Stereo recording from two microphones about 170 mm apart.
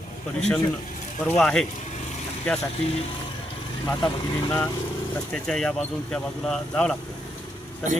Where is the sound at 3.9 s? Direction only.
25° left (ahead or behind).